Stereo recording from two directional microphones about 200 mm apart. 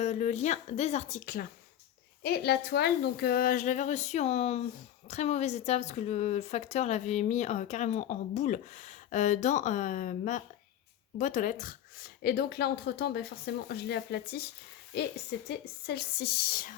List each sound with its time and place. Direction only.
0.0 s a woman's voice: 35° left (ahead or behind)
2.2 s a woman's voice: 55° left (ahead or behind)
15.4 s speech: 55° left (ahead or behind)